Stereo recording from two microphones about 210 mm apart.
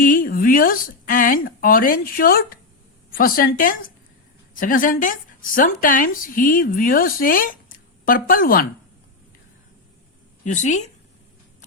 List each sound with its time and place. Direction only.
0.0 s a woman's voice: 40° left (ahead or behind)
10.4 s speech: 35° left (ahead or behind)